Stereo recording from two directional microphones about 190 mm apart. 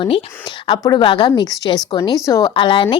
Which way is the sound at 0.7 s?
25° left (ahead or behind).